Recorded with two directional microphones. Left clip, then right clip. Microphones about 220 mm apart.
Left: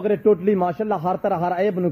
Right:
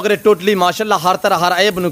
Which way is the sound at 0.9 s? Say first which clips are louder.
Right 8 dB; 20° right (ahead or behind).